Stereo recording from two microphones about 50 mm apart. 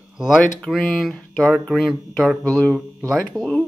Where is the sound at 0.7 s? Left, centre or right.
Centre.